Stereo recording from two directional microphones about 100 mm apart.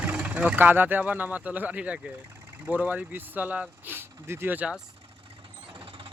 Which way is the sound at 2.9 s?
15° right (ahead or behind).